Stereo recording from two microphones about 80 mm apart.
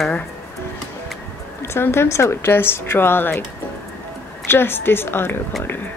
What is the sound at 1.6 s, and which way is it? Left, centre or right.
Speech, left.